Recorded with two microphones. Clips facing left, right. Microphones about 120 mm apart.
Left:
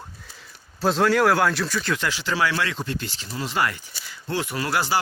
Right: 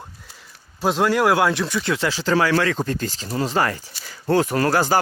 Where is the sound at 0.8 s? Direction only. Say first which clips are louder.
Right 1 dB; 10° right (ahead or behind).